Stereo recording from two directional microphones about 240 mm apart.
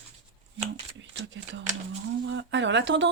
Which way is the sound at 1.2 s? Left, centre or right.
Right.